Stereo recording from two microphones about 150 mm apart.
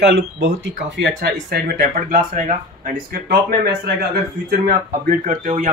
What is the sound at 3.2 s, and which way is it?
Speech, 90° right.